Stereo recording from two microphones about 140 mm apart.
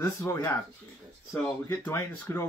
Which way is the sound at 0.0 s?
20° left (ahead or behind).